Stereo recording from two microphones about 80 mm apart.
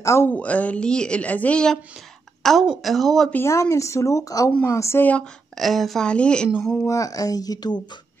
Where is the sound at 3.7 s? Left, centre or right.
Left.